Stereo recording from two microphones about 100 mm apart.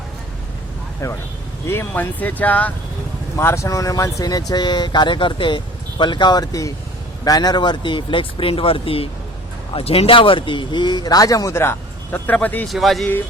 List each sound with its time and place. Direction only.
1.0 s speech: 35° left (ahead or behind)
1.6 s speech: 25° left (ahead or behind)
3.3 s speech: 30° left (ahead or behind); by 9.0 s 65° left (ahead or behind)
9.7 s speech: 80° left; by 12.6 s 15° left (ahead or behind)
12.6 s speech: centre (ahead or behind)